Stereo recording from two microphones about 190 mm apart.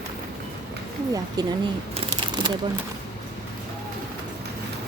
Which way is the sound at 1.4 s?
20° right (ahead or behind).